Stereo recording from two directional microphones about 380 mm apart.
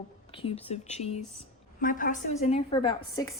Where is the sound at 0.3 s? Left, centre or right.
Centre.